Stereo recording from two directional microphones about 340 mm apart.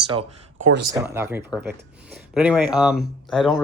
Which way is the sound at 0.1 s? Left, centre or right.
Centre.